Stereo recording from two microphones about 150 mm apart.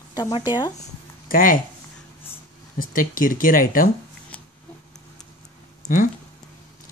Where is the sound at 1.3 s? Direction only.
65° left (ahead or behind).